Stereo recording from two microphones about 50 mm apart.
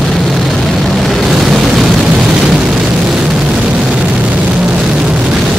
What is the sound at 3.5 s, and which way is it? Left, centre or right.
Vehicle, right.